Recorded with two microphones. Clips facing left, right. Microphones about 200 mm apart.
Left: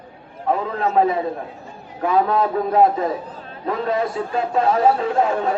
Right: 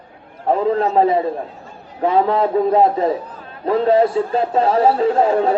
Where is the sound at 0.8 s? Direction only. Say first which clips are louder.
Right 3 dB; 30° right (ahead or behind).